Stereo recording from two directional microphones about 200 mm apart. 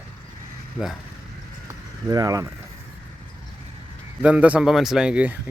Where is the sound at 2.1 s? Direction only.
20° right (ahead or behind).